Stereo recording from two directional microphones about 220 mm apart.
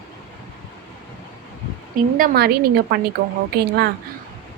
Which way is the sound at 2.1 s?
40° right (ahead or behind).